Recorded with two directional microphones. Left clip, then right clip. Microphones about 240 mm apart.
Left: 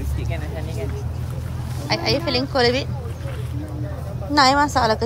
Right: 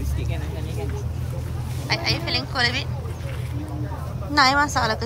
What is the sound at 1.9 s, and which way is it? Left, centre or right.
Speech, left.